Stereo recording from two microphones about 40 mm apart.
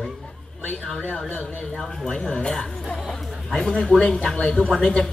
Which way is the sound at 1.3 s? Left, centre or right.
Left.